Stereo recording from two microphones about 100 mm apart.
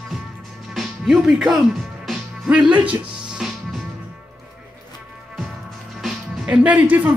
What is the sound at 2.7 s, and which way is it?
Music, 15° right (ahead or behind).